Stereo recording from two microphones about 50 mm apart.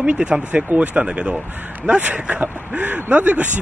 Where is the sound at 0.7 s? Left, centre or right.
Right.